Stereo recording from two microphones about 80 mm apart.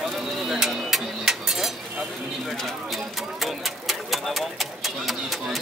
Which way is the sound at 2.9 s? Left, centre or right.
Centre.